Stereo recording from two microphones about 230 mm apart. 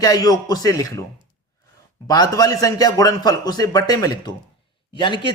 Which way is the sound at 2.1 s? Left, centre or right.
Centre.